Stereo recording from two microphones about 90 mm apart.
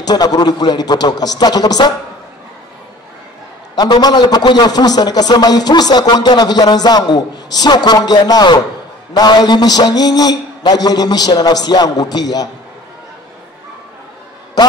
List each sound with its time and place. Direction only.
0.0 s a man's voice: 45° left (ahead or behind)
3.7 s a man's voice: 50° left (ahead or behind)